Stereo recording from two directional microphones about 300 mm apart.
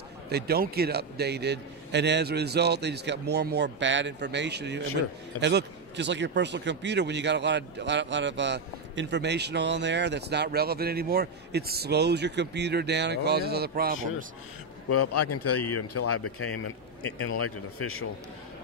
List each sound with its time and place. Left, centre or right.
0.3 s a man's voice: right
14.9 s speech: left